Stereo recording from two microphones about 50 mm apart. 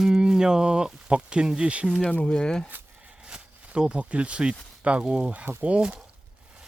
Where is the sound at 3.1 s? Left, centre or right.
Right.